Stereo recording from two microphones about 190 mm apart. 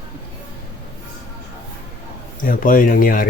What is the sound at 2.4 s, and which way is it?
Speech, 45° left (ahead or behind).